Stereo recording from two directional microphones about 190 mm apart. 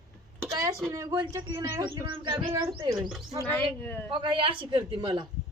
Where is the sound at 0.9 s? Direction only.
20° right (ahead or behind).